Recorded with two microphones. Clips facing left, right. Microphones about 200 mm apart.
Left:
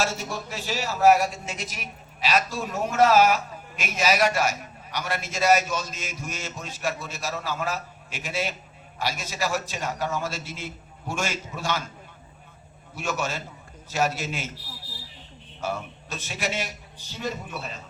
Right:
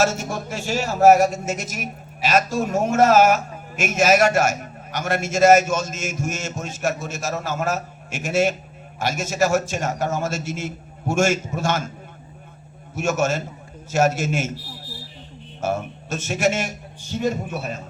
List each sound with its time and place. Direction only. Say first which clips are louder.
0.0 s speech: right 7 dB; 45° right (ahead or behind)
13.0 s speech: right 8 dB; 45° right (ahead or behind)
15.6 s speech: right 6 dB; 45° right (ahead or behind)